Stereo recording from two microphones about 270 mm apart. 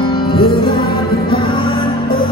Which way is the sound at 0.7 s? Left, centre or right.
Left.